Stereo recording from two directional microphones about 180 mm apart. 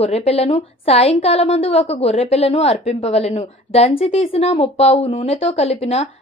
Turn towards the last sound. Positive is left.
turn(degrees=35)  # may be behind; listen again after turning